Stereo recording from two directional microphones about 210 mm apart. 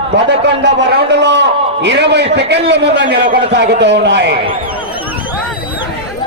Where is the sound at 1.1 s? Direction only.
55° right (ahead or behind).